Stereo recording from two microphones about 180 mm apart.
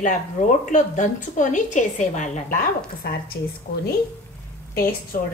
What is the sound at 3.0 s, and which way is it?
Speech, 60° left (ahead or behind).